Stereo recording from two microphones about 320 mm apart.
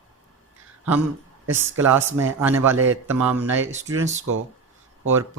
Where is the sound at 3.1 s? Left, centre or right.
Centre.